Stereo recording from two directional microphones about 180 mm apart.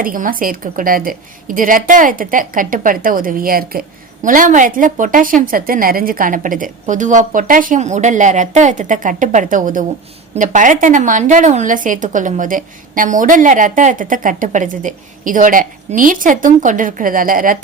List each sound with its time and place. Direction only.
0.0 s a woman's voice: 50° right (ahead or behind)